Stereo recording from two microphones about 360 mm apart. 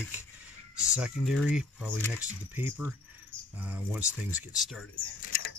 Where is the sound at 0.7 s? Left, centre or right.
Centre.